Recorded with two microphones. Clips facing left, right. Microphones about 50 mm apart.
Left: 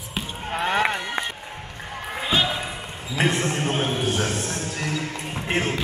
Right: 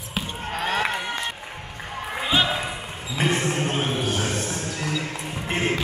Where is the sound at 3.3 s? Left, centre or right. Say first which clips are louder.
Right 1 dB; centre.